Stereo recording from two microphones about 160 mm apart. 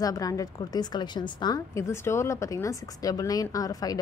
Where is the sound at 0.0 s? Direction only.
20° left (ahead or behind).